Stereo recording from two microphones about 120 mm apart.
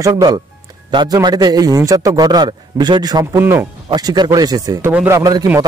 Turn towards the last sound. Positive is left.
turn(degrees=-30)  # may be behind; listen again after turning